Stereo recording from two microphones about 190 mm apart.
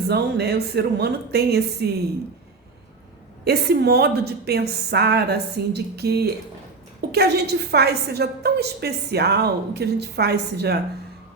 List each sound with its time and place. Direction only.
0.1 s a woman's voice: 60° right (ahead or behind)
3.4 s a woman's voice: 60° right (ahead or behind)